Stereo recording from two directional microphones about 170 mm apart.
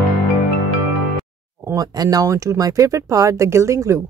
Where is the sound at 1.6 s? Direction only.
20° right (ahead or behind).